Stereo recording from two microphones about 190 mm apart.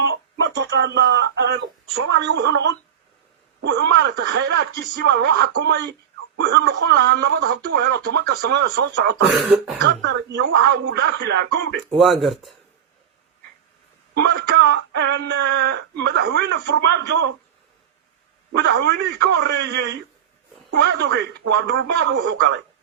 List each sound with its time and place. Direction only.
0.1 s a sound: 60° right (ahead or behind)
2.0 s speech: 70° right (ahead or behind)
9.3 s speech: centre (ahead or behind)
9.8 s speech: 65° right (ahead or behind)
11.8 s speech: centre (ahead or behind)
14.1 s speech: 65° right (ahead or behind)
18.6 s speech: 65° right (ahead or behind)